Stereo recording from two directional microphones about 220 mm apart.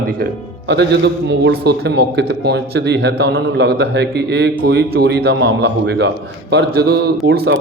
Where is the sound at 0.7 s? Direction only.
50° right (ahead or behind).